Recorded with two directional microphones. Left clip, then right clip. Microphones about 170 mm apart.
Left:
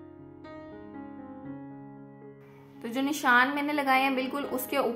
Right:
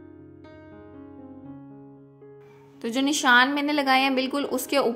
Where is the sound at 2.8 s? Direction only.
35° right (ahead or behind).